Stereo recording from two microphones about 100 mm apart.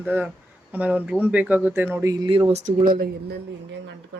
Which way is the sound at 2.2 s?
65° right (ahead or behind).